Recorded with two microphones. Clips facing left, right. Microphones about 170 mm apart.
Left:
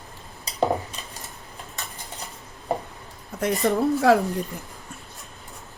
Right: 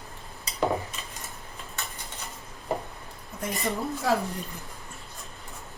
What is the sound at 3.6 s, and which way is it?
Speech, 70° left (ahead or behind).